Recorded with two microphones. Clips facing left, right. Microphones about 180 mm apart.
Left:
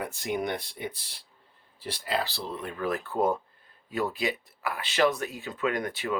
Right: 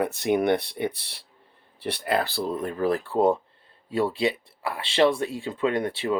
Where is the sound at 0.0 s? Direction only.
65° right (ahead or behind).